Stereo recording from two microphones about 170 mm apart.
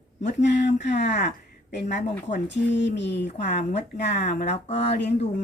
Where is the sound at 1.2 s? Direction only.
90° left.